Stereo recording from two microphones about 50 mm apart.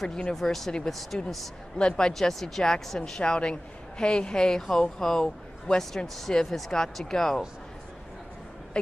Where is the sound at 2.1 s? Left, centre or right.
Centre.